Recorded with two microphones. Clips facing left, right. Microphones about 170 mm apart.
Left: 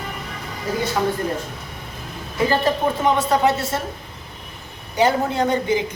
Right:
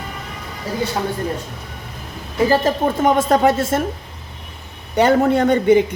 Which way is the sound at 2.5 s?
45° right (ahead or behind).